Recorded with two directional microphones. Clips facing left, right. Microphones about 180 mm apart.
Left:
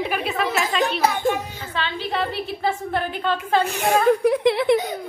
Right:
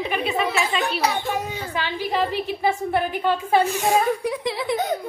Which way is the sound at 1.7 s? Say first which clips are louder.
Right 1 dB; 15° right (ahead or behind).